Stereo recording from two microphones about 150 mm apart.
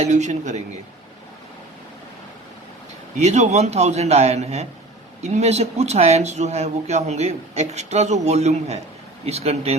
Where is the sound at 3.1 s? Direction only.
50° right (ahead or behind).